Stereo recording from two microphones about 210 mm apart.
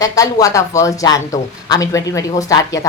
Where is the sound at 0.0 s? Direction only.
15° left (ahead or behind).